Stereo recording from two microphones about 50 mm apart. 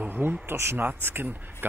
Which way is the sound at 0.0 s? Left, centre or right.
Right.